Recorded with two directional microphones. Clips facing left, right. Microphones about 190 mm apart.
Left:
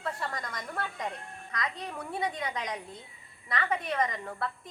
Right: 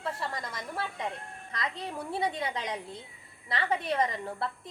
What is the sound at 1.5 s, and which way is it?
A woman's voice, 30° right (ahead or behind).